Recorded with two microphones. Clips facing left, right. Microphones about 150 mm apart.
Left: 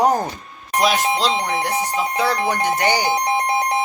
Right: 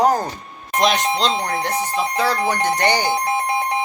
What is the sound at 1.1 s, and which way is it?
Speech, 15° left (ahead or behind).